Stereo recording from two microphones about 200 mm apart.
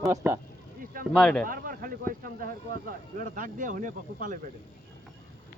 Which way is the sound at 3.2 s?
40° right (ahead or behind).